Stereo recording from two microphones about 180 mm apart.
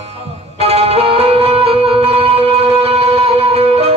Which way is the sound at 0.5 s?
35° right (ahead or behind).